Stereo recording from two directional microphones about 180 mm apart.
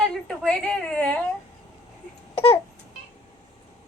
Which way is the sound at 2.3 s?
30° left (ahead or behind).